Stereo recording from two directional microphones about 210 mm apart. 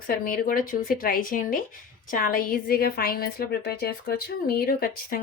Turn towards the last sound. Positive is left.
turn(degrees=45)  # may be behind; listen again after turning